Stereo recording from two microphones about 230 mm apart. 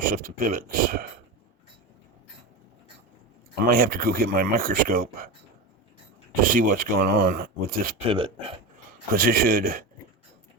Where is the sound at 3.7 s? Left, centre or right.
Right.